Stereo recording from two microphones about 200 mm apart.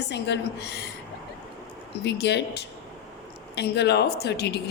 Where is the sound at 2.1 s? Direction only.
55° left (ahead or behind).